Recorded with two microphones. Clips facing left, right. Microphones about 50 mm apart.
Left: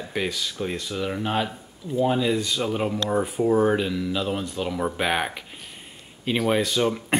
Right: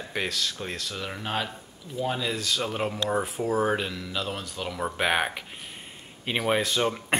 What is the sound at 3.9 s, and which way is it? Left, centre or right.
Speech, centre.